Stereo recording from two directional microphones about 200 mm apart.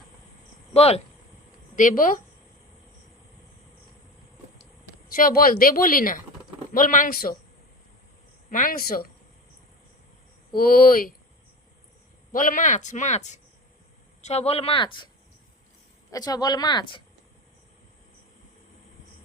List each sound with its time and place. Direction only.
0.7 s speech: 30° left (ahead or behind)
1.7 s speech: 40° left (ahead or behind)
5.0 s speech: 45° left (ahead or behind)
8.4 s speech: 40° left (ahead or behind)
10.5 s speech: 45° left (ahead or behind)
12.3 s speech: 40° left (ahead or behind)
16.1 s speech: 20° left (ahead or behind)